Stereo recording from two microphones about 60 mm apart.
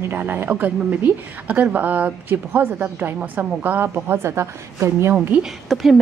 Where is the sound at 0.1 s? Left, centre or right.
Right.